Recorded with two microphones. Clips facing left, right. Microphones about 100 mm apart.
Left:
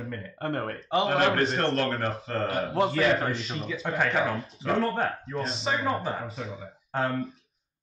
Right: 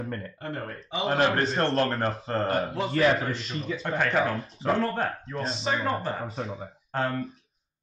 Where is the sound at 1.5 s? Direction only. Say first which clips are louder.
Right 1 dB; 35° right (ahead or behind).